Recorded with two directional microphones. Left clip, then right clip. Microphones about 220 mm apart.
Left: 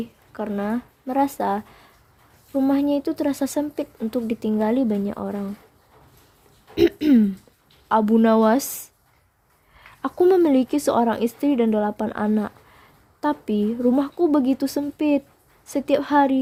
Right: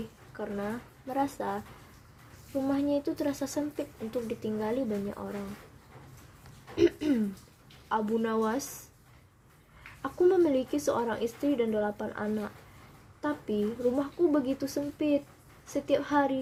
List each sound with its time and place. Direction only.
0.3 s speech: 45° left (ahead or behind)
2.6 s speech: 45° left (ahead or behind)
6.7 s speech: 45° left (ahead or behind)
10.0 s speech: 45° left (ahead or behind)